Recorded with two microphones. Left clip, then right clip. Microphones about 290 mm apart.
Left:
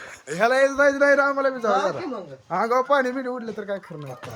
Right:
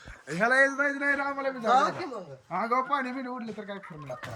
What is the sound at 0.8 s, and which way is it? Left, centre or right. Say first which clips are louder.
A man's voice: left 10 dB; centre.